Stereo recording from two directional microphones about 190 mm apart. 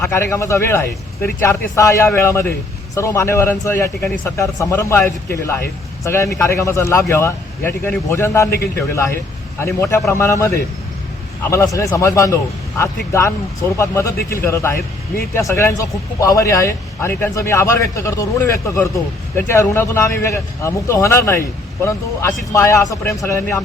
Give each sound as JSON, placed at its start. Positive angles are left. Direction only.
{"t": 0.0, "sound": "speech", "side_deg": 15}
{"t": 8.4, "sound": "a man's voice", "side_deg": 55}
{"t": 8.7, "sound": "speech", "side_deg": 15}